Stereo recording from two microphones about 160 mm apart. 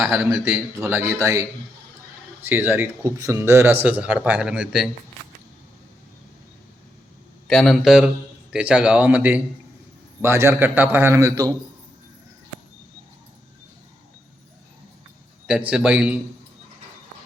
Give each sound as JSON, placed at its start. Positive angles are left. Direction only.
{"t": 0.4, "sound": "speech", "side_deg": -15}
{"t": 7.4, "sound": "a man's voice", "side_deg": 0}
{"t": 15.4, "sound": "speech", "side_deg": -5}